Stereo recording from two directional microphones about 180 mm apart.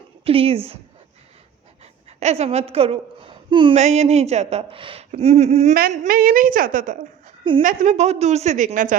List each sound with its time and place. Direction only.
0.3 s a woman's voice: 30° right (ahead or behind)
1.8 s a sound: 35° right (ahead or behind)
3.8 s a woman's voice: 40° right (ahead or behind)
5.7 s a woman's voice: 45° right (ahead or behind)